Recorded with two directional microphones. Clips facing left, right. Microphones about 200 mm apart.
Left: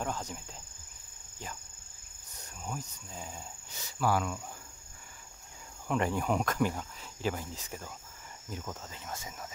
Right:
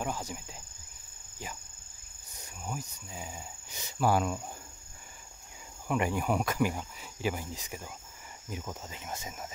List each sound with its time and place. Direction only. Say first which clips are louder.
0.0 s speech: right 1 dB; 10° right (ahead or behind)
2.3 s wheeze: right 1 dB; 10° right (ahead or behind)
3.8 s speech: right 3 dB; 25° right (ahead or behind)
5.9 s cricket: right 1 dB; 10° right (ahead or behind)